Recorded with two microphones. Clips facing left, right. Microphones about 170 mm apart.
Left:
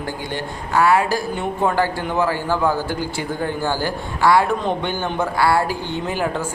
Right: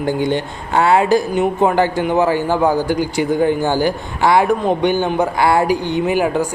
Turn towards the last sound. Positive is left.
turn(degrees=-15)  # may be behind; listen again after turning